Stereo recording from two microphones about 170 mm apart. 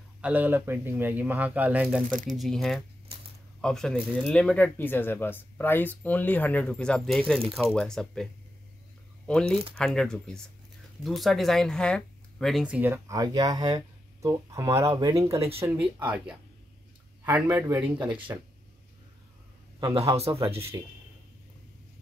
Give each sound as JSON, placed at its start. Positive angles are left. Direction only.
{"t": 0.2, "sound": "speech", "side_deg": -10}
{"t": 2.0, "sound": "speech", "side_deg": -50}
{"t": 2.3, "sound": "speech", "side_deg": 0}
{"t": 9.3, "sound": "speech", "side_deg": 5}
{"t": 17.5, "sound": "speech", "side_deg": -15}
{"t": 17.9, "sound": "speech", "side_deg": -30}
{"t": 19.9, "sound": "a man's voice", "side_deg": -35}